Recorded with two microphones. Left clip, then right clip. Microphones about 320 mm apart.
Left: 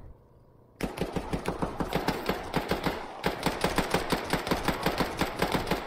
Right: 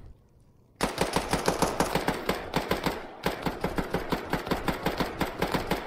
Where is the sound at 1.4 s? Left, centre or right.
Right.